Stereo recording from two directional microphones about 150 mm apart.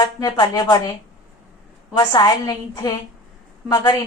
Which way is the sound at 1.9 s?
30° left (ahead or behind).